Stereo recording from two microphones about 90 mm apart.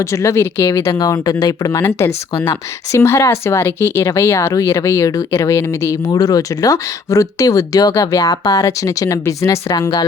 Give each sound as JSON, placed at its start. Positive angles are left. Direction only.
{"t": 0.0, "sound": "speech", "side_deg": 30}
{"t": 0.9, "sound": "speech", "side_deg": 45}
{"t": 2.0, "sound": "speech", "side_deg": 30}
{"t": 6.1, "sound": "speech", "side_deg": 40}